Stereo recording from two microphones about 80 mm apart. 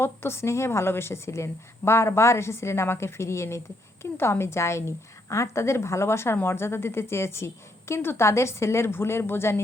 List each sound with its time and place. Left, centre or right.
0.0 s a woman's voice: left